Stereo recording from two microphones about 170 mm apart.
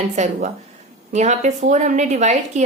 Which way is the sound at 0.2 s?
40° right (ahead or behind).